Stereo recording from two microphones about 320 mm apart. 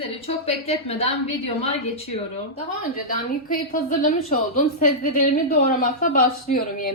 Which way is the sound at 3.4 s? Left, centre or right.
Left.